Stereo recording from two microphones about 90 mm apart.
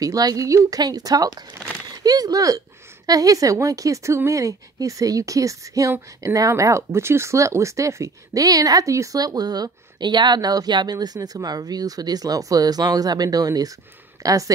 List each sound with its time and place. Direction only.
0.0 s a woman's voice: 45° right (ahead or behind)